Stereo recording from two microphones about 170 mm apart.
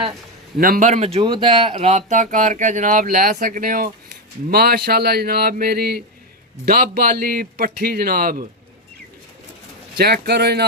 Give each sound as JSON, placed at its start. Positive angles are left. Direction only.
{"t": 0.6, "sound": "speech", "side_deg": -55}
{"t": 10.0, "sound": "speech", "side_deg": -70}